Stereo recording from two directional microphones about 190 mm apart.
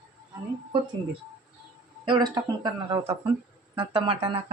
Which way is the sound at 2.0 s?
25° right (ahead or behind).